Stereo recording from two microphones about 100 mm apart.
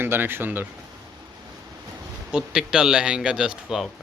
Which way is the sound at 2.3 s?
5° right (ahead or behind).